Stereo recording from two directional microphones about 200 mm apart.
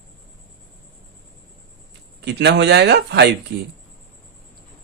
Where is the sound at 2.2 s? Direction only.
60° right (ahead or behind).